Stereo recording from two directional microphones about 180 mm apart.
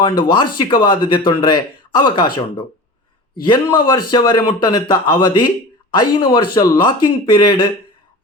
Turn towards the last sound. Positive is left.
turn(degrees=25)  # may be behind; listen again after turning